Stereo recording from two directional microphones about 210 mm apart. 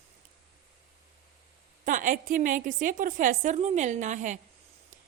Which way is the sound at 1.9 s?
40° right (ahead or behind).